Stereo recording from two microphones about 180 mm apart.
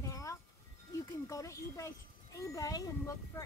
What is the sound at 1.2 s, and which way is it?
Speech, 15° left (ahead or behind).